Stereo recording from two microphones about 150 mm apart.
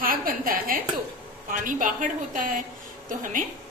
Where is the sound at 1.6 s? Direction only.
65° right (ahead or behind).